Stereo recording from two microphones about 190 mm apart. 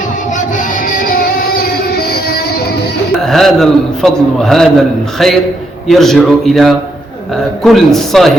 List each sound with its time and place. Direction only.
0.9 s music: 45° left (ahead or behind)
3.2 s a man's voice: centre (ahead or behind)